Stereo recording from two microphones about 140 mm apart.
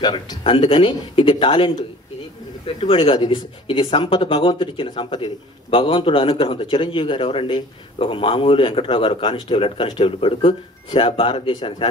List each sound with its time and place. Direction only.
0.0 s speech: 30° left (ahead or behind)
2.9 s speech: 35° left (ahead or behind)